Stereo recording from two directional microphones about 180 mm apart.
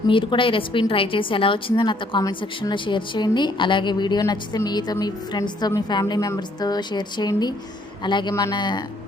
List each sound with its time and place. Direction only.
0.1 s a woman's voice: 30° left (ahead or behind)